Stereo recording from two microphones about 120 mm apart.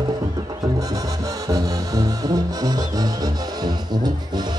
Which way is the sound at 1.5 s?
30° right (ahead or behind).